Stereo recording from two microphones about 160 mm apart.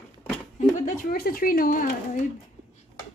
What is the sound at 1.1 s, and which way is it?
Speech, 65° left (ahead or behind).